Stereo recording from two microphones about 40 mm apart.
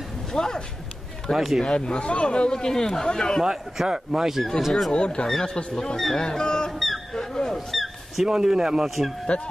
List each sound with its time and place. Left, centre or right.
0.3 s speech: centre
1.3 s speech: centre
1.6 s speech: left
3.8 s speech: centre
4.6 s speech: centre
4.9 s speech: left
6.7 s music: centre
7.2 s a sound: centre
7.5 s a sound: centre
8.3 s speech: centre
8.8 s speech: centre